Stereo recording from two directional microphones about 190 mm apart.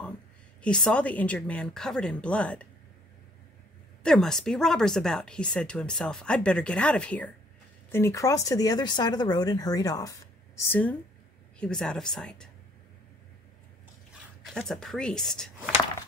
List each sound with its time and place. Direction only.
0.6 s speech: 5° left (ahead or behind)
4.0 s speech: 5° left (ahead or behind)
14.4 s speech: centre (ahead or behind)